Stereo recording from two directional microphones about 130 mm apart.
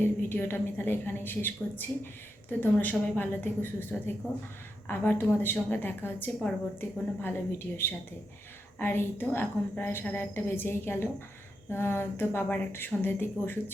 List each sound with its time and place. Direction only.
0.0 s a woman's voice: 15° left (ahead or behind)
8.8 s a woman's voice: 15° left (ahead or behind)